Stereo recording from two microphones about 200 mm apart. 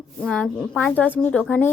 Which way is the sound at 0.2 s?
5° left (ahead or behind).